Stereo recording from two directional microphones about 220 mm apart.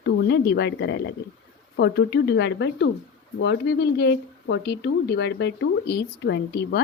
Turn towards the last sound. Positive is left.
turn(degrees=50)  # may be behind; listen again after turning